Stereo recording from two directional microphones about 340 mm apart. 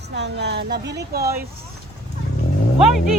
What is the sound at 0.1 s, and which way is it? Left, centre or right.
Speech, right.